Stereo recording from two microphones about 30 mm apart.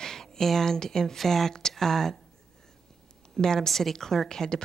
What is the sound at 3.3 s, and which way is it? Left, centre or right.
Speech, centre.